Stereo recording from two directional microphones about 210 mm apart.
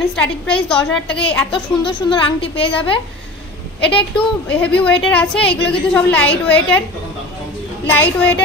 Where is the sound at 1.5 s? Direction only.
25° left (ahead or behind).